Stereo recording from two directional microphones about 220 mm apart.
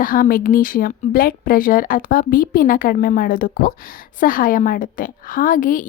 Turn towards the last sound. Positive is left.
turn(degrees=40)  # may be behind; listen again after turning